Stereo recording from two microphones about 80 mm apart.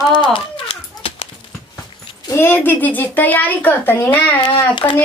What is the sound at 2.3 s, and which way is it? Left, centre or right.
Speech, left.